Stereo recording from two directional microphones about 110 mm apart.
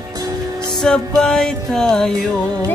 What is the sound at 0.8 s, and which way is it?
Music, 5° left (ahead or behind).